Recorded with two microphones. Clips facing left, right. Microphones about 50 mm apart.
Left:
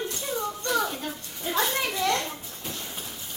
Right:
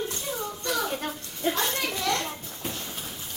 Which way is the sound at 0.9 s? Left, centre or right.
Right.